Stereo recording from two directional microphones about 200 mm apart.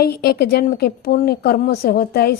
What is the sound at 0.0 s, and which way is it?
Speech, 55° left (ahead or behind).